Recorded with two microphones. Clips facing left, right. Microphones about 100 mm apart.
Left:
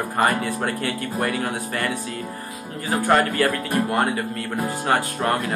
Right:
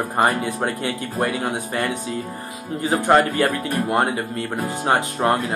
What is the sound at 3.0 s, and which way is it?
Speech, 25° right (ahead or behind).